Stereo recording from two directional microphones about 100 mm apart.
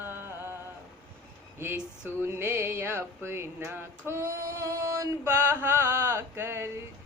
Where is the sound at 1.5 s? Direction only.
20° right (ahead or behind).